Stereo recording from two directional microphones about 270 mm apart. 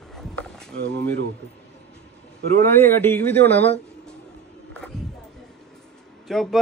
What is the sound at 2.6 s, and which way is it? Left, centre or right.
Speech, centre.